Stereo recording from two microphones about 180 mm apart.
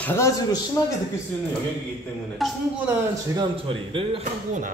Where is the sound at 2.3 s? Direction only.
Centre (ahead or behind).